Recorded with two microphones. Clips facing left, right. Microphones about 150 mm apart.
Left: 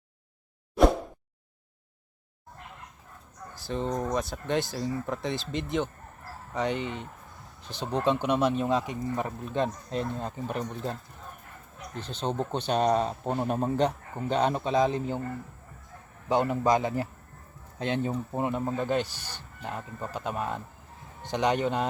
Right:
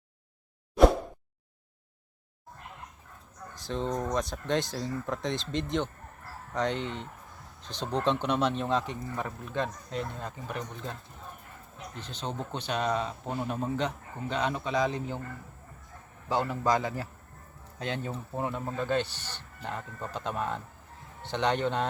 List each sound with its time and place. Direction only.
3.5 s speech: 5° left (ahead or behind)
9.1 s speech: 20° left (ahead or behind)
12.0 s speech: 30° left (ahead or behind)
16.3 s speech: 20° left (ahead or behind)